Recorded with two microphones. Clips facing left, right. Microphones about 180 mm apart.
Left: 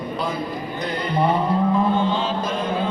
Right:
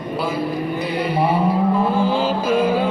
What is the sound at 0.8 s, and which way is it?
Mantra, 5° right (ahead or behind).